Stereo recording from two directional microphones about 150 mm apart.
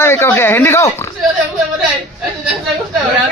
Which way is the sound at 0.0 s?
15° left (ahead or behind).